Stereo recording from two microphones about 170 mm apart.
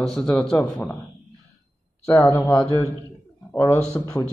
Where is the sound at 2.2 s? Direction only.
10° left (ahead or behind).